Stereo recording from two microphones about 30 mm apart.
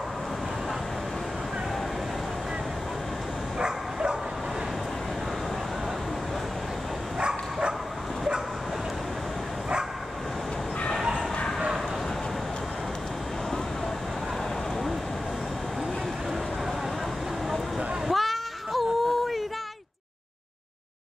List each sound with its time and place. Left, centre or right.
3.5 s dog: right
7.2 s bow-wow: right
18.1 s a sound: centre